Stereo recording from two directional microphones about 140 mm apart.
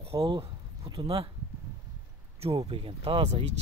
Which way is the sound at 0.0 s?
40° right (ahead or behind).